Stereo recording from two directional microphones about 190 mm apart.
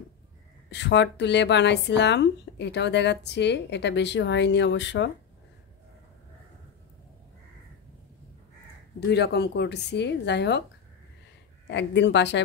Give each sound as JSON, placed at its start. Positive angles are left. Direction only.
{"t": 0.7, "sound": "a woman's voice", "side_deg": 65}
{"t": 9.0, "sound": "a woman's voice", "side_deg": 60}
{"t": 11.6, "sound": "speech", "side_deg": 65}